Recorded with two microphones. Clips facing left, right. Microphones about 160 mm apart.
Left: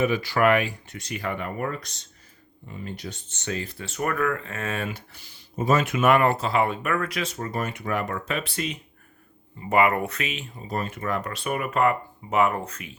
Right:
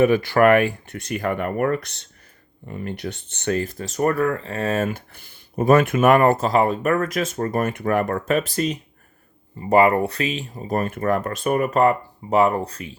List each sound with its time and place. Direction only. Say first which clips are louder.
0.0 s speech: right 6 dB; 55° right (ahead or behind); by 10.6 s 35° right (ahead or behind)
10.7 s speech: right 7 dB; 50° right (ahead or behind); by 13.0 s 35° right (ahead or behind)